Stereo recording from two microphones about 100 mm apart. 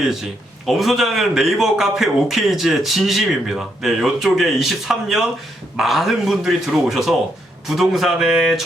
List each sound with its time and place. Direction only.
0.1 s a man's voice: centre (ahead or behind)